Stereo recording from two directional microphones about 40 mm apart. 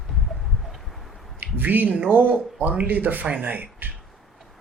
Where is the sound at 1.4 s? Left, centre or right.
Right.